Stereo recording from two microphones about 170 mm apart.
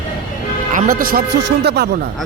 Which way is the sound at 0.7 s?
50° right (ahead or behind).